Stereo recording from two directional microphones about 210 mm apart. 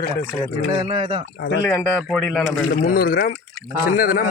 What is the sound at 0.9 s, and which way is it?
Speech, 25° right (ahead or behind).